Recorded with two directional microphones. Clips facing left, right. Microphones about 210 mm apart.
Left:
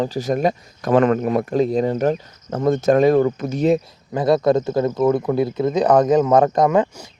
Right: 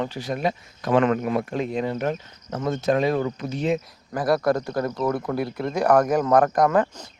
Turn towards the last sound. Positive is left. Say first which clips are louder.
# left 3 dB
turn(degrees=20)  # may be behind; listen again after turning